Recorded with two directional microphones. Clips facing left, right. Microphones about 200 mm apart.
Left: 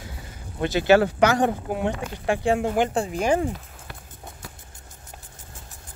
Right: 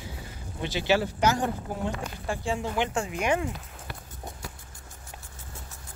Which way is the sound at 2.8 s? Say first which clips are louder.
Left 5 dB; 35° left (ahead or behind).